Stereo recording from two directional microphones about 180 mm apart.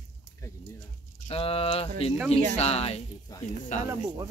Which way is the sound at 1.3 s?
30° left (ahead or behind).